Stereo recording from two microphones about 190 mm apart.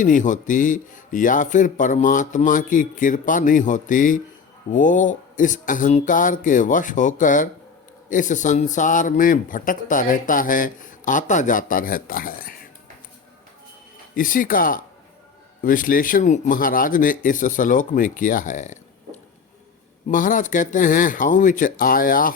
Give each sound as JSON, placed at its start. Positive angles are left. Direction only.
{"t": 0.0, "sound": "speech", "side_deg": 40}
{"t": 14.2, "sound": "speech", "side_deg": 45}